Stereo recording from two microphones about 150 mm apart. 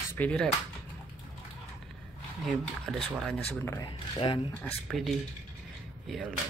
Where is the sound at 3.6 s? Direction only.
25° left (ahead or behind).